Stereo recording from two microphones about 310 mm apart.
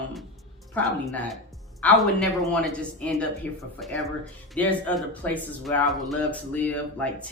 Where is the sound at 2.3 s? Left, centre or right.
Centre.